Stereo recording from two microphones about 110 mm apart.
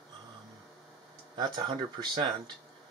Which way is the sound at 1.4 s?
40° right (ahead or behind).